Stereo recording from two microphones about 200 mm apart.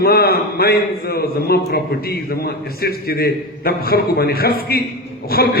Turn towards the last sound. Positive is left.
turn(degrees=50)  # may be behind; listen again after turning